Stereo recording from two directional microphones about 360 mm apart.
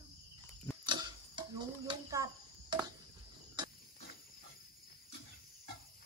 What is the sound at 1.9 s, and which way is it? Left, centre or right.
Cricket, centre.